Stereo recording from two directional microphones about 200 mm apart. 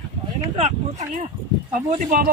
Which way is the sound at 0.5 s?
35° right (ahead or behind).